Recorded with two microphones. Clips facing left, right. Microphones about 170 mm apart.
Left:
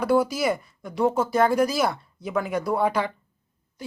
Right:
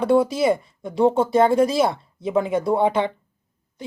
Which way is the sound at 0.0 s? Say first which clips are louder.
Right 4 dB; 25° right (ahead or behind).